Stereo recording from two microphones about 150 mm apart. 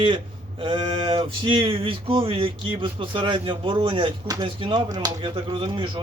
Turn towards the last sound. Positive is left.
turn(degrees=-35)  # may be behind; listen again after turning